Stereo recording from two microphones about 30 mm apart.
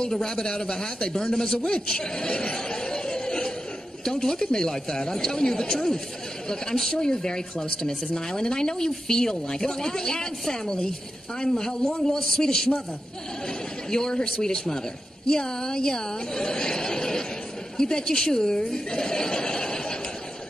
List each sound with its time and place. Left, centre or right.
0.0 s speech: left
1.7 s chuckle: left
4.0 s speech: centre
13.8 s speech: left